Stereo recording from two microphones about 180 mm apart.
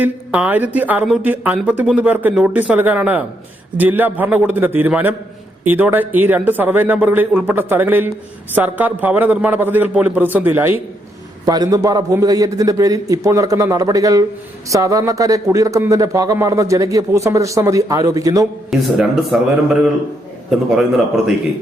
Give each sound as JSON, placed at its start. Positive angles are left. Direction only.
{"t": 0.0, "sound": "speech", "side_deg": -10}
{"t": 18.7, "sound": "speech", "side_deg": -5}